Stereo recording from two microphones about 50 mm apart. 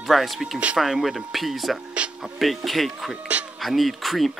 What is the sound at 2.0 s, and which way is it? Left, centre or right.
Speech, right.